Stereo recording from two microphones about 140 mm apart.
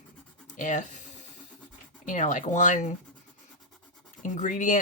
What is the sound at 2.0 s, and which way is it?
Speech, 60° left (ahead or behind).